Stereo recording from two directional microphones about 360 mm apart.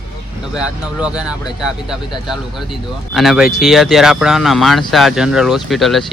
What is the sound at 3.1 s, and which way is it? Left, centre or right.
Speech, centre.